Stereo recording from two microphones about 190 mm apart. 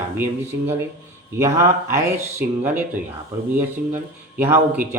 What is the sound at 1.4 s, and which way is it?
Speech, 15° right (ahead or behind).